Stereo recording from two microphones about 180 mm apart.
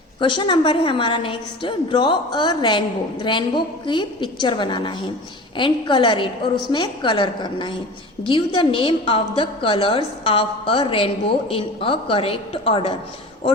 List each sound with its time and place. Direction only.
0.2 s a woman's voice: 25° left (ahead or behind)